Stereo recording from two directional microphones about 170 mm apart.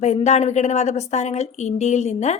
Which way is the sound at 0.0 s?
40° left (ahead or behind).